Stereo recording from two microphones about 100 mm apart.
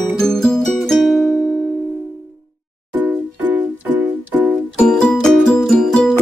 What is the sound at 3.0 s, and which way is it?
Music, 15° right (ahead or behind).